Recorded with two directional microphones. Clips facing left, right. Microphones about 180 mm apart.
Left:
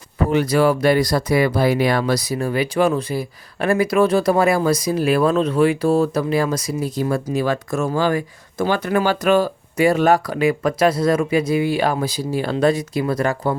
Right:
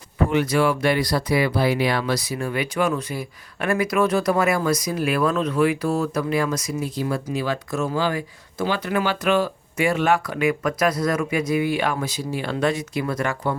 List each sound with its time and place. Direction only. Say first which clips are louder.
0.3 s speech: left 4 dB; 35° left (ahead or behind)